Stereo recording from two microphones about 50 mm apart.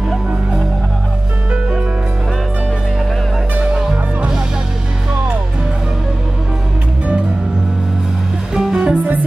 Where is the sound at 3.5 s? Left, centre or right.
Centre.